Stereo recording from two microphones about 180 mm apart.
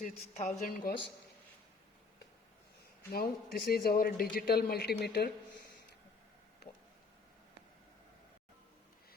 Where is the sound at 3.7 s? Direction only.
55° left (ahead or behind).